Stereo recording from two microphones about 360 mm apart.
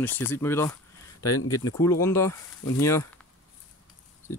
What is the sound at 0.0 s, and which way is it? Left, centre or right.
Speech, centre.